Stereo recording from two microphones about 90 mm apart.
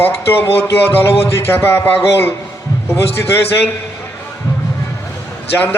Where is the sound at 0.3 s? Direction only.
25° left (ahead or behind).